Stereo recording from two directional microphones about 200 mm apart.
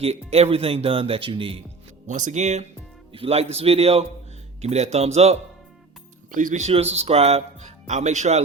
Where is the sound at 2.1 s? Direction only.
40° right (ahead or behind).